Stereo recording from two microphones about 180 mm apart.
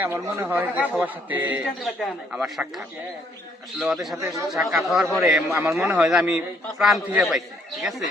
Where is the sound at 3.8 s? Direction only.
Centre (ahead or behind).